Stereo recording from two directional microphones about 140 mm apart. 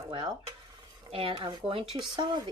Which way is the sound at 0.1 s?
35° right (ahead or behind).